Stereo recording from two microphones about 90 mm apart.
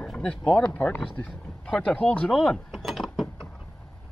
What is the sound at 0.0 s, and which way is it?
Speech, 5° left (ahead or behind).